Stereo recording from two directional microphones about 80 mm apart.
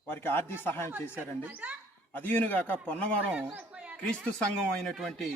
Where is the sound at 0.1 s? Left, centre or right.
Left.